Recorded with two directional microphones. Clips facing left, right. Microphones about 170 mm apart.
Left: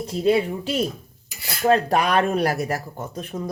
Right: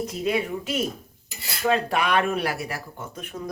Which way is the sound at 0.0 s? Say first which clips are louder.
Left 5 dB; 30° left (ahead or behind).